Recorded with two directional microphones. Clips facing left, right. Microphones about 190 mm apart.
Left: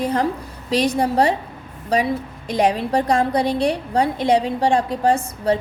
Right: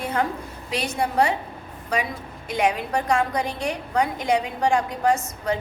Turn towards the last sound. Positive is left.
turn(degrees=30)  # may be behind; listen again after turning